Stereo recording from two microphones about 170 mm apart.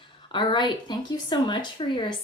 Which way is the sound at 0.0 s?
30° left (ahead or behind).